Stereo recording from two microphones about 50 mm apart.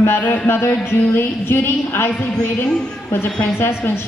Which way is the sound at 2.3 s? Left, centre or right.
Centre.